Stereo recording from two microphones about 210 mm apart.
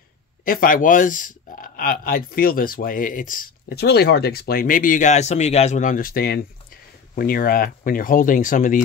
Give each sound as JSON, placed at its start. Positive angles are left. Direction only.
{"t": 0.5, "sound": "speech", "side_deg": 40}